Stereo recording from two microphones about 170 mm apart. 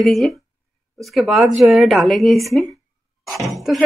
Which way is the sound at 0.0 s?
Centre (ahead or behind).